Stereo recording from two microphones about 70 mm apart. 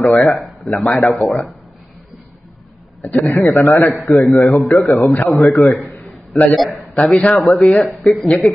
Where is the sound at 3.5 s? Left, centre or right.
Left.